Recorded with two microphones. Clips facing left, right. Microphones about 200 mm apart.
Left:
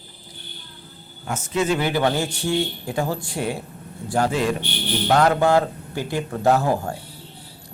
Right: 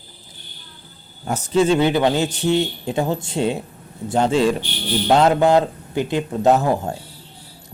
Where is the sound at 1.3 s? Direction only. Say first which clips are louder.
Right 5 dB; 30° right (ahead or behind).